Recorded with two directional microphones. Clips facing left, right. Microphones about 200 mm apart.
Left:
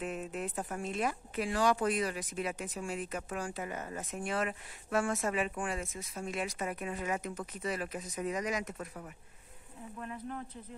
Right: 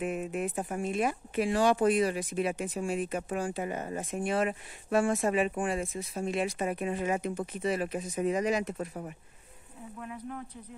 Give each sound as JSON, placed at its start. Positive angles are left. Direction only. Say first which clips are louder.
{"t": 0.0, "sound": "speech", "louder": "right 5 dB", "side_deg": -15}
{"t": 9.9, "sound": "speech", "louder": "right 1 dB", "side_deg": 0}